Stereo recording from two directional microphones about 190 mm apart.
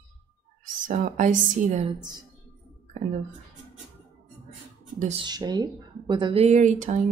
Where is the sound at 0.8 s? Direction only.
45° right (ahead or behind).